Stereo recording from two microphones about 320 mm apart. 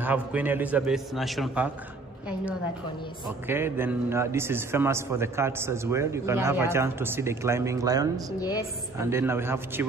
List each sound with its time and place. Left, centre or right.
0.0 s a man's voice: centre
3.4 s a man's voice: centre
8.4 s a woman's voice: centre
8.9 s a man's voice: centre